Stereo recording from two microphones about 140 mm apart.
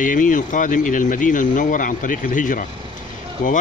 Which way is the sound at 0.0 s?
70° left (ahead or behind).